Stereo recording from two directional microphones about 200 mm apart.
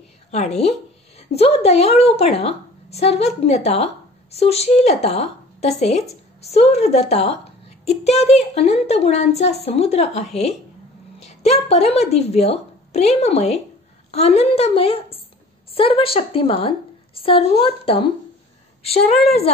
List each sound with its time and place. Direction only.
0.3 s a woman's voice: 35° left (ahead or behind)